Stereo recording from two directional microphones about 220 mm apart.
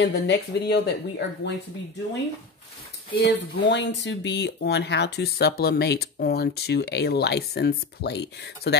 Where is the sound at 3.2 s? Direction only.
50° left (ahead or behind).